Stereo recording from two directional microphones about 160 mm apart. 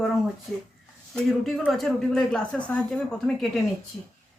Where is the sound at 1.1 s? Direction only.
Centre (ahead or behind).